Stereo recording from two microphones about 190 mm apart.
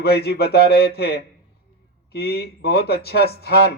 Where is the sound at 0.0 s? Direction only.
55° left (ahead or behind).